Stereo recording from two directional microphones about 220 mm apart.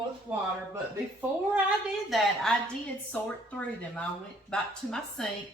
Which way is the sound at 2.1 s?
Centre (ahead or behind).